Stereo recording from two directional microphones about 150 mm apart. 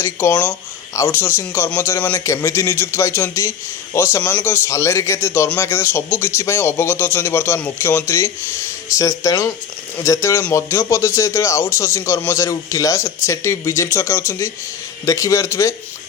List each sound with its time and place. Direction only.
0.0 s a man's voice: 15° left (ahead or behind)